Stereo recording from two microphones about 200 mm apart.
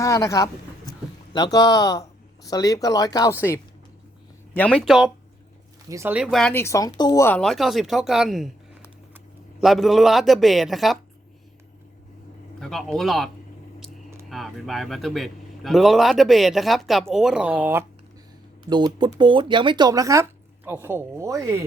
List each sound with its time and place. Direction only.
0.0 s a man's voice: 15° left (ahead or behind); by 10.9 s centre (ahead or behind)
12.5 s a man's voice: 5° left (ahead or behind)
18.6 s speech: 20° right (ahead or behind)